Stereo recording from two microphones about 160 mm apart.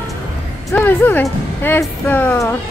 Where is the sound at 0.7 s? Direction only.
10° left (ahead or behind).